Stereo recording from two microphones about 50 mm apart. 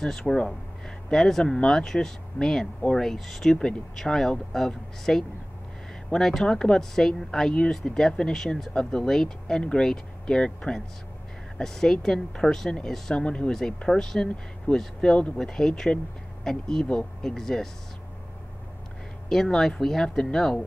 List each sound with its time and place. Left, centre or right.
0.0 s speech: centre
13.5 s speech: centre
19.2 s speech: centre